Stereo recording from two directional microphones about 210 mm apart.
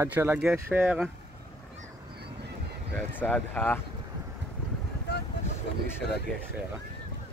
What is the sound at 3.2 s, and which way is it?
Speech, 5° left (ahead or behind).